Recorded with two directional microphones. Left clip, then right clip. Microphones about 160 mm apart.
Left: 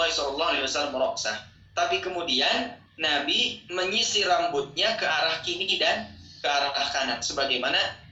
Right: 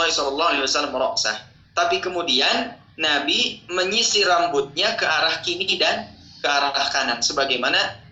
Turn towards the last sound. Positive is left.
turn(degrees=-25)  # may be behind; listen again after turning